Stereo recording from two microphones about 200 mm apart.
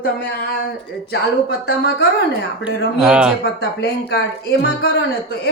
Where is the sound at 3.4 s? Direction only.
55° left (ahead or behind).